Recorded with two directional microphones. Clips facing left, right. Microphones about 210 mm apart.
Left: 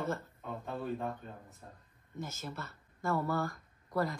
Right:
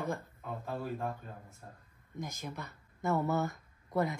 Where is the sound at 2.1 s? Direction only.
15° right (ahead or behind).